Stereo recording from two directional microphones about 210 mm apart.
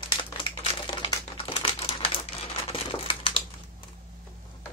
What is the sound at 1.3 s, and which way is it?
Crumpling, 25° left (ahead or behind).